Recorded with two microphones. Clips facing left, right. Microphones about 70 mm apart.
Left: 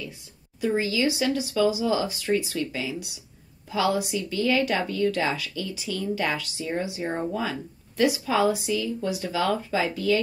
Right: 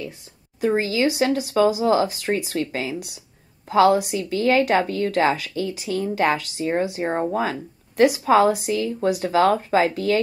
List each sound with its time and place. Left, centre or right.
0.6 s a woman's voice: right